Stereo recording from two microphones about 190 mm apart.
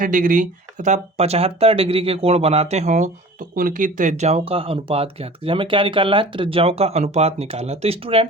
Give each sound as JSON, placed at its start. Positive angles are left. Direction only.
{"t": 0.0, "sound": "speech", "side_deg": -45}